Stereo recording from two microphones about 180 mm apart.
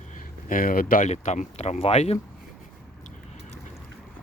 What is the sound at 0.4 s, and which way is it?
Speech, 50° left (ahead or behind).